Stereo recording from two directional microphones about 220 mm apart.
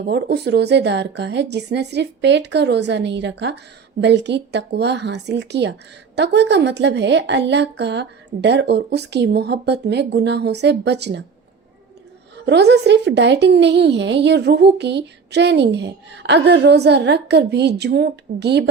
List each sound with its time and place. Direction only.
0.0 s speech: 50° right (ahead or behind)
12.5 s speech: 50° right (ahead or behind)